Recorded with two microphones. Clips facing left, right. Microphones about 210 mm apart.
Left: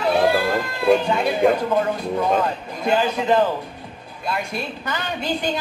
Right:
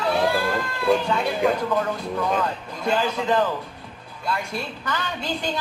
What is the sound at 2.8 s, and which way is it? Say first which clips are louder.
Speech: left 3 dB; 20° left (ahead or behind).